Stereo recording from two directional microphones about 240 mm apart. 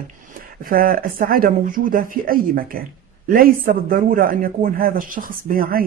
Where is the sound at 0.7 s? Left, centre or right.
Right.